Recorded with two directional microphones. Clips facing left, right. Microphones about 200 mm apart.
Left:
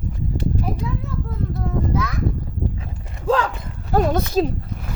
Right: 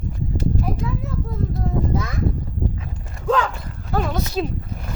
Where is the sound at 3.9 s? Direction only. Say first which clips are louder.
Left 5 dB; 40° left (ahead or behind).